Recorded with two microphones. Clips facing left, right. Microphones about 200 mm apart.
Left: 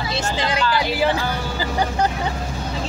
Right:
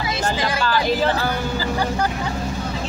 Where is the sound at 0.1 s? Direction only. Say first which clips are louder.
Even; 25° left (ahead or behind).